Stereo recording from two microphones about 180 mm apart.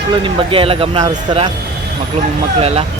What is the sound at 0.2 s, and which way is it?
Speech, 30° right (ahead or behind).